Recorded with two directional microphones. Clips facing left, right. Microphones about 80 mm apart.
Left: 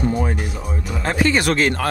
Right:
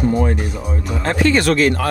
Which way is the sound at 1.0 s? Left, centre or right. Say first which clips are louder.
Right 2 dB; centre.